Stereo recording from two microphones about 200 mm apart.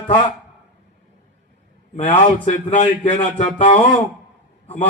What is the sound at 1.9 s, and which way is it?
A man's voice, 35° left (ahead or behind).